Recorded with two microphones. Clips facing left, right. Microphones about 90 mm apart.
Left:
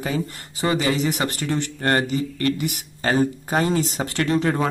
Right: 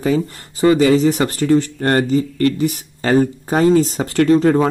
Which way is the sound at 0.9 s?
35° right (ahead or behind).